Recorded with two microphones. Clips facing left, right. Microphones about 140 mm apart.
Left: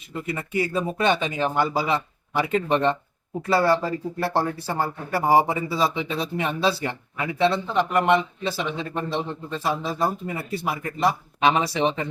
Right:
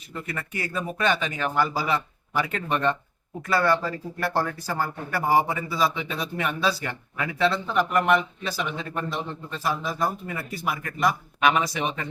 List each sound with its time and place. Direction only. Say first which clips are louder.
0.1 s speech: left 5 dB; 20° left (ahead or behind)